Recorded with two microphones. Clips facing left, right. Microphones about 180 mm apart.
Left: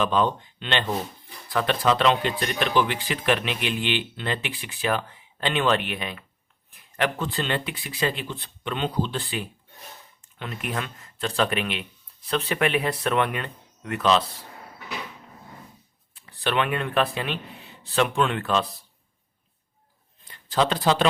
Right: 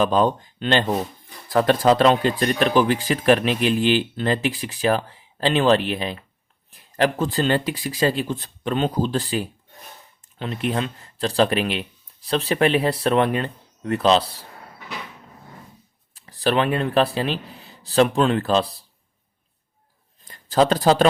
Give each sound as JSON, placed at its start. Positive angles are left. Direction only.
{"t": 0.0, "sound": "speech", "side_deg": -40}
{"t": 16.1, "sound": "speech", "side_deg": -40}
{"t": 20.2, "sound": "speech", "side_deg": -45}